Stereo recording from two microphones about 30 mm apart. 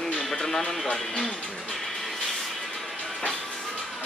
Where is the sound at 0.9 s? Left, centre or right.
Left.